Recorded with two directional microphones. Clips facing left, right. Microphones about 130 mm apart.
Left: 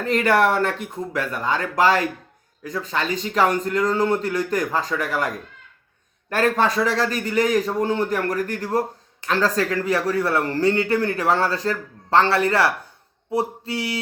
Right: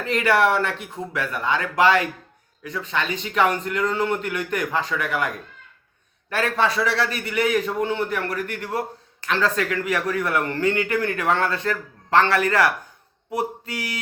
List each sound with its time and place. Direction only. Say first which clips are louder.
0.0 s speech: left 1 dB; 45° left (ahead or behind)
6.3 s speech: left 3 dB; 45° left (ahead or behind)
13.3 s mantra: left 3 dB; 30° left (ahead or behind)